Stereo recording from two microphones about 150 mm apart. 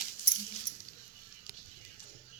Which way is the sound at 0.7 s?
65° left (ahead or behind).